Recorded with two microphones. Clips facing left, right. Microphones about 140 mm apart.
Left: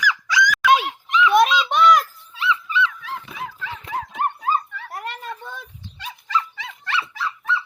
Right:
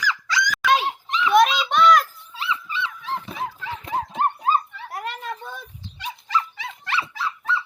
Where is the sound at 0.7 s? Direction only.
35° right (ahead or behind).